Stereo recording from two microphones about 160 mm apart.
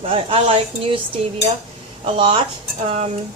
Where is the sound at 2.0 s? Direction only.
30° right (ahead or behind).